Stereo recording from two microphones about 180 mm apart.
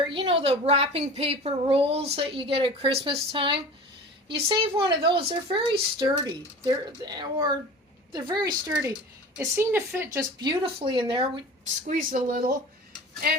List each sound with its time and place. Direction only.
0.1 s a woman's voice: 30° right (ahead or behind)
11.9 s speech: 50° right (ahead or behind)